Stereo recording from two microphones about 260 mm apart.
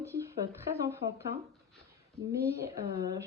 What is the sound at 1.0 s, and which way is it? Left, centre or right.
Speech, right.